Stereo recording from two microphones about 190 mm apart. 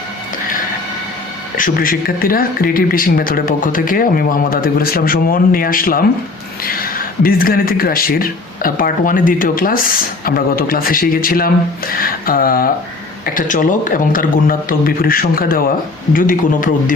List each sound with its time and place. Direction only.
1.5 s speech: 45° left (ahead or behind)